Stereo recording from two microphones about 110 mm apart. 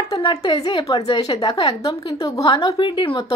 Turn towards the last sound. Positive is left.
turn(degrees=45)  # may be behind; listen again after turning